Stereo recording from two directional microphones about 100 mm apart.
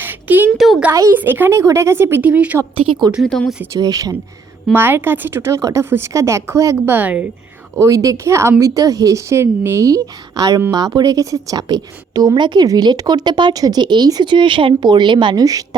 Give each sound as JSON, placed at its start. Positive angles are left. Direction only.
{"t": 0.0, "sound": "a sound", "side_deg": -20}
{"t": 0.5, "sound": "a sound", "side_deg": 0}
{"t": 1.1, "sound": "speech", "side_deg": -20}
{"t": 2.7, "sound": "a woman's voice", "side_deg": -65}
{"t": 3.2, "sound": "speech", "side_deg": 5}
{"t": 3.8, "sound": "a woman's voice", "side_deg": -40}
{"t": 4.7, "sound": "speech", "side_deg": -20}
{"t": 6.9, "sound": "a woman's voice", "side_deg": -15}
{"t": 7.8, "sound": "a woman's voice", "side_deg": -35}